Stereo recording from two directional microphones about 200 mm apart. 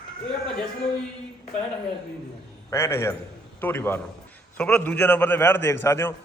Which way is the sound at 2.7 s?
15° left (ahead or behind).